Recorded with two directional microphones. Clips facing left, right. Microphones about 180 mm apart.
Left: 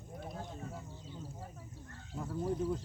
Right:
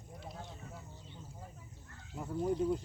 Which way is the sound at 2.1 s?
15° right (ahead or behind).